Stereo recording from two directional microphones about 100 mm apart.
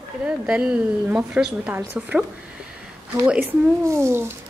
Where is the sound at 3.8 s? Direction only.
25° right (ahead or behind).